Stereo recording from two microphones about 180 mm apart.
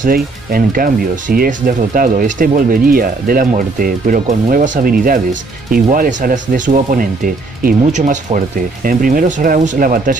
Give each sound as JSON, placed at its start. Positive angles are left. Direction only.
{"t": 0.0, "sound": "speech", "side_deg": -50}